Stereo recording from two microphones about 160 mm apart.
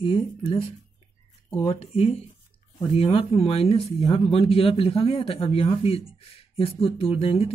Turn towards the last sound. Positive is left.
turn(degrees=35)  # may be behind; listen again after turning